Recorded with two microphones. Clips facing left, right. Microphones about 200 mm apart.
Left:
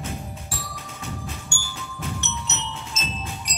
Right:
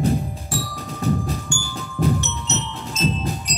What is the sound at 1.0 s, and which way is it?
Music, 35° right (ahead or behind).